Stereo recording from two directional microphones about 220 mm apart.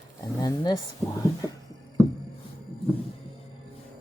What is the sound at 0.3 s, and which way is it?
Speech, 20° left (ahead or behind).